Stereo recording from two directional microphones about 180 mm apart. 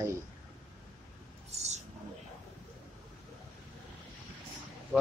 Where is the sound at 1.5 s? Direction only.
40° right (ahead or behind).